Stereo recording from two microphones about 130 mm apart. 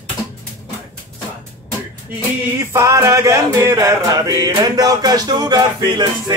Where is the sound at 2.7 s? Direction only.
20° right (ahead or behind).